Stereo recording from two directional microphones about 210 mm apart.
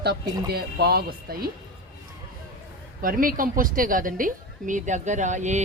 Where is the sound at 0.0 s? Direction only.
50° right (ahead or behind).